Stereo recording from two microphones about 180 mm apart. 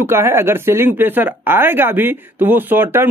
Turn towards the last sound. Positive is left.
turn(degrees=-10)  # may be behind; listen again after turning